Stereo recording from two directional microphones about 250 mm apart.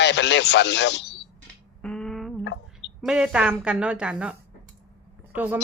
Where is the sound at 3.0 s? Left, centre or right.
Centre.